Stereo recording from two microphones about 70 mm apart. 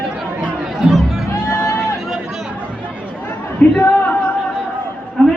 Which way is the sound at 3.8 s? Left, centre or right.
Left.